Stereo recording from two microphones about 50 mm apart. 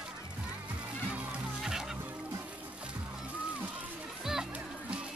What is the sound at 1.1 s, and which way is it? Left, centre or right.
Music, right.